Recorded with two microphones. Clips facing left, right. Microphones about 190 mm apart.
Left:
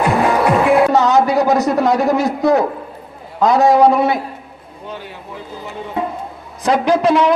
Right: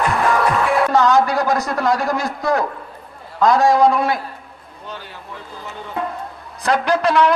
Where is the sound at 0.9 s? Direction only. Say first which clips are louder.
Left 2 dB; 5° left (ahead or behind).